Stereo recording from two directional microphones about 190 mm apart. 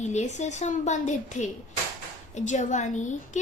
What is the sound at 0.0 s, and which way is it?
A woman's voice, 40° left (ahead or behind).